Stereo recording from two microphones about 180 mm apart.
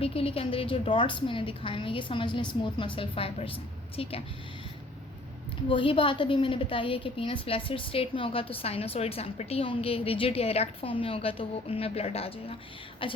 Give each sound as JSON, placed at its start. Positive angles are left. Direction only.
{"t": 0.0, "sound": "a woman's voice", "side_deg": 30}
{"t": 5.6, "sound": "a woman's voice", "side_deg": 30}